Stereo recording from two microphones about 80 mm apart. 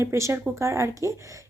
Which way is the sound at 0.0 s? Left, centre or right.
Right.